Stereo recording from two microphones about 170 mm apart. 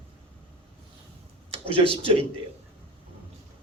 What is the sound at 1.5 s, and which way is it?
Speech, 30° right (ahead or behind).